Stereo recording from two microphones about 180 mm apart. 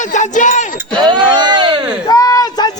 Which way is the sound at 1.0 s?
25° right (ahead or behind).